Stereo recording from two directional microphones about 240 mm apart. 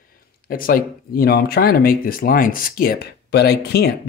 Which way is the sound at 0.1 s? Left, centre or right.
Left.